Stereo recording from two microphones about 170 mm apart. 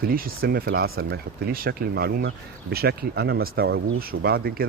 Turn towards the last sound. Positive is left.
turn(degrees=-65)  # may be behind; listen again after turning